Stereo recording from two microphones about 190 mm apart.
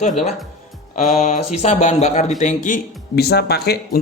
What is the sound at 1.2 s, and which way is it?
A man's voice, 40° left (ahead or behind).